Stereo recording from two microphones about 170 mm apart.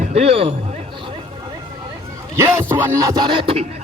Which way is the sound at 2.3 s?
15° right (ahead or behind).